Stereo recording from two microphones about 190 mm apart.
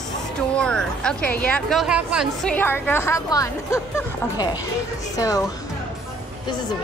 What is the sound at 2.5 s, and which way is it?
A woman's voice, 10° left (ahead or behind).